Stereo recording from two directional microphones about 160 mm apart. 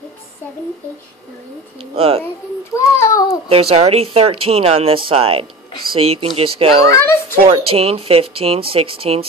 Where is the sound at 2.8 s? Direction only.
20° left (ahead or behind).